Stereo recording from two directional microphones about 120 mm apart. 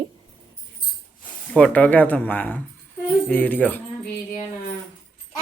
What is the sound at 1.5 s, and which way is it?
Speech, 10° left (ahead or behind).